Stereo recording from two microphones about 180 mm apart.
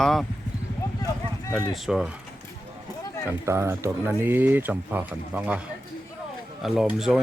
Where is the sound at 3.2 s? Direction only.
15° right (ahead or behind).